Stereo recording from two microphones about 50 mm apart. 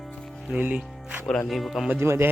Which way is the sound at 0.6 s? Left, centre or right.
Right.